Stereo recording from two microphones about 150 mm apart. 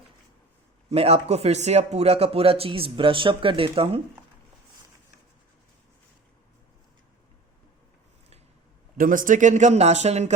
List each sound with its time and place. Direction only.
0.9 s speech: 45° right (ahead or behind)
9.0 s speech: 65° right (ahead or behind); by 10.3 s 50° right (ahead or behind)